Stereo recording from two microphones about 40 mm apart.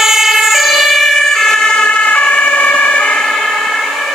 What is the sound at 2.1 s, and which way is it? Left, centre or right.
Emergency vehicle, left.